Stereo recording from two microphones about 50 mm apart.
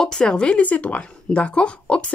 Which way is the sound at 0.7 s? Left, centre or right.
Left.